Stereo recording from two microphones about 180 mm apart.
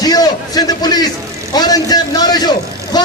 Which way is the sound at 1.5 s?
20° left (ahead or behind).